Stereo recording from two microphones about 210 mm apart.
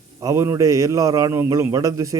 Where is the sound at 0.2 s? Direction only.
15° right (ahead or behind).